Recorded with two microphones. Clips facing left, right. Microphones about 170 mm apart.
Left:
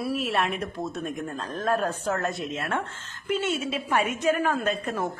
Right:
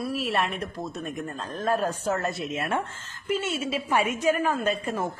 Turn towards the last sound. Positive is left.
turn(degrees=-10)  # may be behind; listen again after turning